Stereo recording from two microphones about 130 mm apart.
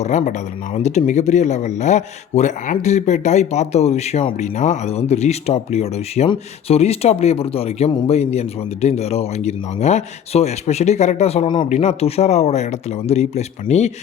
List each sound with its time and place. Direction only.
0.0 s a man's voice: 65° left (ahead or behind)
4.4 s a man's voice: 65° left (ahead or behind)